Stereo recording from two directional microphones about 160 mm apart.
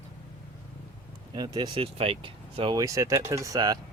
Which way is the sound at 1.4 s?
30° right (ahead or behind).